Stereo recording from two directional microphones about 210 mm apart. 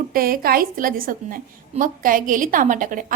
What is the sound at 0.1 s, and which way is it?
A woman's voice, 45° right (ahead or behind).